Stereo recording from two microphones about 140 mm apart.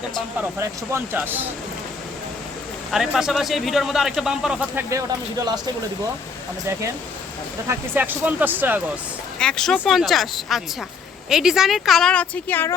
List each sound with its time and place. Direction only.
0.6 s speech: 20° right (ahead or behind)
2.9 s a man's voice: 5° right (ahead or behind)
4.8 s speech: 20° right (ahead or behind)
7.7 s speech: 15° right (ahead or behind)
9.4 s a man's voice: 5° left (ahead or behind)